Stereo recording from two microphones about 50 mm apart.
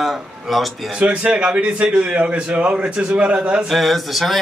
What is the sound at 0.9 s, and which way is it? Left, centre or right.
A man's voice, right.